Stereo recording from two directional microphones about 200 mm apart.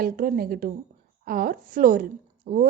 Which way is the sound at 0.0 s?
45° right (ahead or behind).